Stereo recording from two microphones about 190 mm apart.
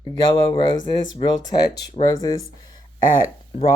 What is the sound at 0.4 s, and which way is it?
Speech, 30° left (ahead or behind).